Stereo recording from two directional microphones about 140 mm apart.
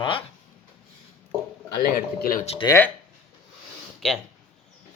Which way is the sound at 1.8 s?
90° left.